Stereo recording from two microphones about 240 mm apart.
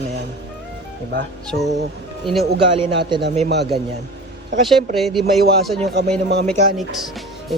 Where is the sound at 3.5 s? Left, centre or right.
Right.